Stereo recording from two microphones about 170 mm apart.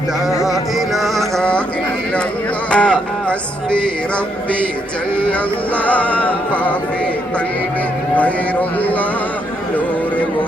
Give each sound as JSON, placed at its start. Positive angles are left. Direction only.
{"t": 0.4, "sound": "music", "side_deg": 0}
{"t": 2.6, "sound": "music", "side_deg": 5}
{"t": 5.7, "sound": "music", "side_deg": 10}